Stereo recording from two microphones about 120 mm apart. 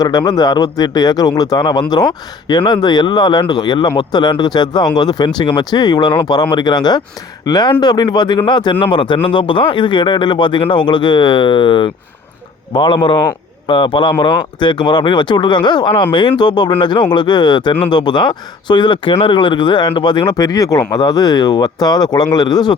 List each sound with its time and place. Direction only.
0.0 s a man's voice: 35° left (ahead or behind)